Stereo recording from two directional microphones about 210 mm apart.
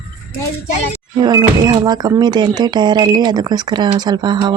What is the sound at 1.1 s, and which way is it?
Speech, 20° right (ahead or behind).